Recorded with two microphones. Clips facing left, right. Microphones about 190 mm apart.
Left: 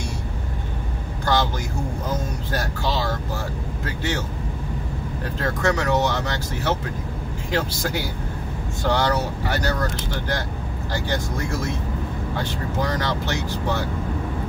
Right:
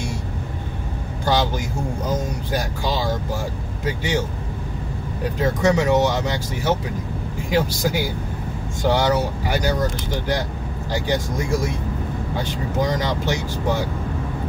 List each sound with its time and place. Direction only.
1.2 s a sound: 15° right (ahead or behind)
2.5 s speech: 15° right (ahead or behind)
5.4 s speech: 15° right (ahead or behind)